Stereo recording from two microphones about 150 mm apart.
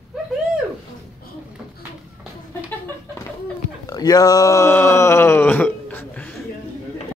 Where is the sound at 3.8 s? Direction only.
25° left (ahead or behind); by 6.3 s 10° left (ahead or behind).